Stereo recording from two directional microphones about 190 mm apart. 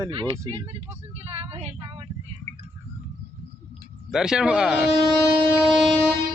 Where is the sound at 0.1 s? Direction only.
25° right (ahead or behind).